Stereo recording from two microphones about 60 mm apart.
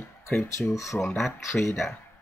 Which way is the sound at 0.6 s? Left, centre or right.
Centre.